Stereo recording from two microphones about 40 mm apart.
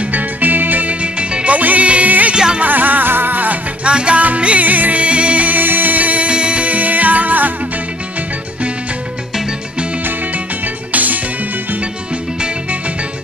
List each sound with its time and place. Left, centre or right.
0.1 s music: right
1.0 s music: right
2.3 s music: right
2.6 s music: right
3.8 s music: right
5.6 s music: right
10.9 s music: right